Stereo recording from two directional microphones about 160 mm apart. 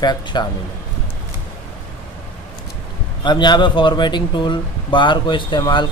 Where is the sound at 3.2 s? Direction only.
30° left (ahead or behind).